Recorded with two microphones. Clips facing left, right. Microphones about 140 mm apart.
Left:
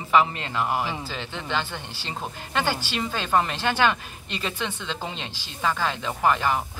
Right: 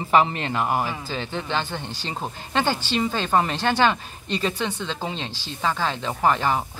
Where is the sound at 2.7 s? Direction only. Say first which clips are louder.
Right 4 dB; 10° left (ahead or behind).